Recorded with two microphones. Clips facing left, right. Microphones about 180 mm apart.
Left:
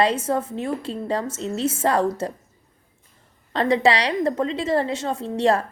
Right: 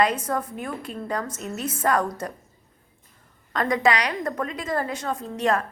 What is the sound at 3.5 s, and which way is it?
A woman's voice, 30° left (ahead or behind).